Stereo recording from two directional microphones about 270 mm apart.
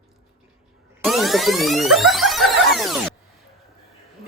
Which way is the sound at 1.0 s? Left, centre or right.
Centre.